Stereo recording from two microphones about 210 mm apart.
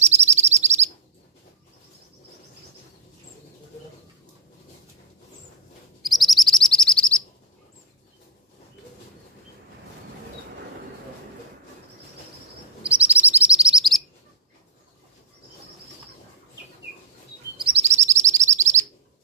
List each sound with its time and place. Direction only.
0.0 s bird: 30° right (ahead or behind)
6.0 s chirp: centre (ahead or behind)
12.8 s chirp: 5° right (ahead or behind)
17.6 s chirp: 25° right (ahead or behind)
18.0 s bird: 35° right (ahead or behind)
18.5 s chirp: 35° right (ahead or behind)